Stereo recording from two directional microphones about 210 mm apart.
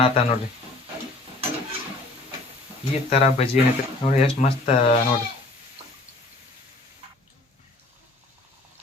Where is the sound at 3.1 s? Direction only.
30° left (ahead or behind).